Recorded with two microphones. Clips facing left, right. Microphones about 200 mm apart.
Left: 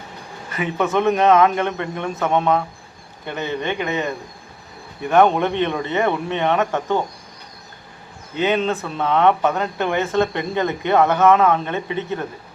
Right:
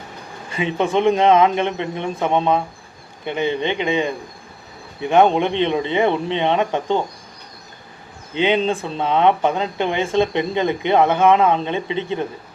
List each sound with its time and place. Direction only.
0.6 s speech: 25° right (ahead or behind)
8.4 s speech: 25° right (ahead or behind)